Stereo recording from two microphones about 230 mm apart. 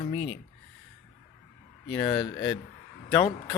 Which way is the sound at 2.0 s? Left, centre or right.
Centre.